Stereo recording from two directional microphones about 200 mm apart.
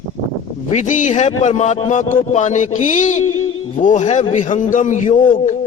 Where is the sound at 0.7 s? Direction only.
40° left (ahead or behind).